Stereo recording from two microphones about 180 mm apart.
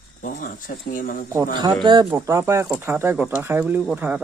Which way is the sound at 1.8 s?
25° right (ahead or behind).